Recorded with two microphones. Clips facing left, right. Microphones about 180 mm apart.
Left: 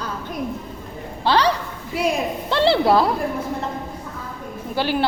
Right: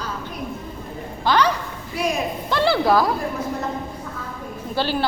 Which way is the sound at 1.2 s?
35° left (ahead or behind).